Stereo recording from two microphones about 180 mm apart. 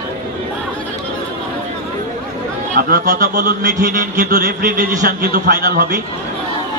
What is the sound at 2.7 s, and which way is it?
A man's voice, 55° right (ahead or behind).